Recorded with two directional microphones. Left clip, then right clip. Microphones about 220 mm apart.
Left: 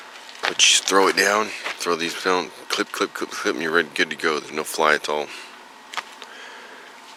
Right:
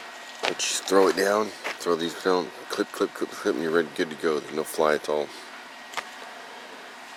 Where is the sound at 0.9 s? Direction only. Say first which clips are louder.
Left 3 dB; 25° left (ahead or behind).